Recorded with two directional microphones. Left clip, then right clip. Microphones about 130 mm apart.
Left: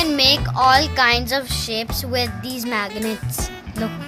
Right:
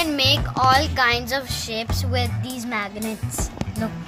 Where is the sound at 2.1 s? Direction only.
30° left (ahead or behind).